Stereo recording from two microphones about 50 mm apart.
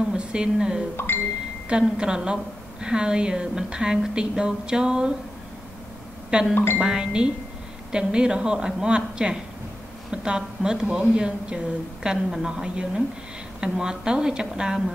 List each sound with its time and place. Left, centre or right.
0.1 s speech: centre
0.9 s a sound: left
1.7 s a woman's voice: centre
6.5 s speech: left
6.8 s a woman's voice: centre